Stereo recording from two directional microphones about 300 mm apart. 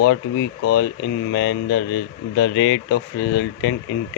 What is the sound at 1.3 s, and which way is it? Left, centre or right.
Speech, left.